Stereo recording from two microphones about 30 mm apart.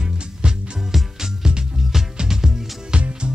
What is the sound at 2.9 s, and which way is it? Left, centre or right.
Music, right.